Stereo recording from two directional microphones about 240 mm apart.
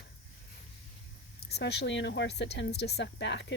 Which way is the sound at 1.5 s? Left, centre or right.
Left.